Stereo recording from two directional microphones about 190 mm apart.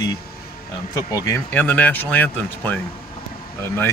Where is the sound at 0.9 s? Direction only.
15° left (ahead or behind).